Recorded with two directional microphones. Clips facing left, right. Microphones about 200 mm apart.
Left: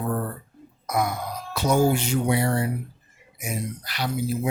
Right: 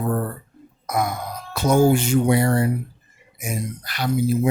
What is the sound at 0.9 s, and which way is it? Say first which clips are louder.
Wail: right 2 dB; 45° right (ahead or behind).